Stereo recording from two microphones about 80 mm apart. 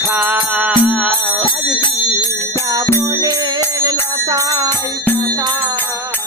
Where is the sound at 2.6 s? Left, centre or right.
Right.